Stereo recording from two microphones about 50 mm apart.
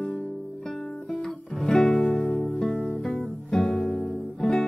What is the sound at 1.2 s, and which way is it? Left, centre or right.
Music, centre.